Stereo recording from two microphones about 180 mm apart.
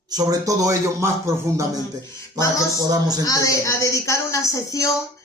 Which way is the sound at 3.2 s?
20° left (ahead or behind).